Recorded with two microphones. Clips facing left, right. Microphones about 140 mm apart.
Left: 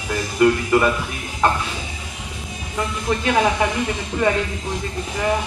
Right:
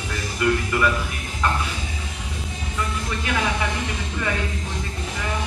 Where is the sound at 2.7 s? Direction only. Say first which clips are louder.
Left 6 dB; 40° left (ahead or behind).